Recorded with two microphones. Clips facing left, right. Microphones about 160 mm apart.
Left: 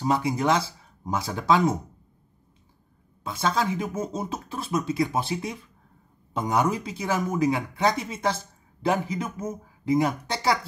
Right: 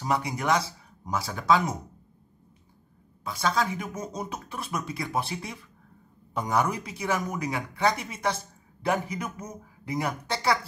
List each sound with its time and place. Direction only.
0.0 s speech: 25° left (ahead or behind)
3.3 s speech: 25° left (ahead or behind)